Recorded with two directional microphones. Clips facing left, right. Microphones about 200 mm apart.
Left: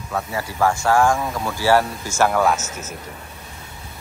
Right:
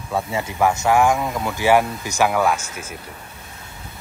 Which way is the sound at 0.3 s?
20° right (ahead or behind).